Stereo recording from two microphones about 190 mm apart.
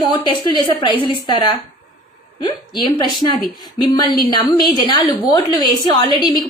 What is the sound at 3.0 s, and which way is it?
Speech, centre (ahead or behind).